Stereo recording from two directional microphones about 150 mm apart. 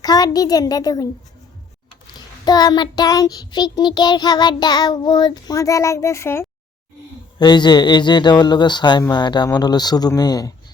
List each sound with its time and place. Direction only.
0.0 s child singing: 25° left (ahead or behind)
2.4 s child singing: 25° left (ahead or behind)
7.3 s child singing: 30° left (ahead or behind)